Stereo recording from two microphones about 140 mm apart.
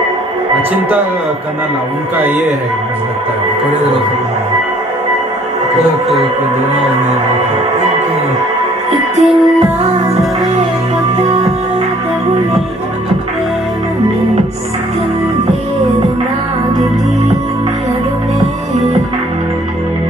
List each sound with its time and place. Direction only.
5.8 s speech: centre (ahead or behind)
8.9 s music: centre (ahead or behind)